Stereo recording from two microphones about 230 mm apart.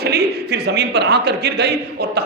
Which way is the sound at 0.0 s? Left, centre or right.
Right.